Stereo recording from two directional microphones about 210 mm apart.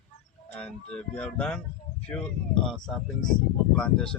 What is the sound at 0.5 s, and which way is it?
Speech, 5° left (ahead or behind).